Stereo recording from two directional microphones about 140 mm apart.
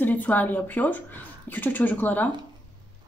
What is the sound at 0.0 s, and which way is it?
Speech, 10° left (ahead or behind).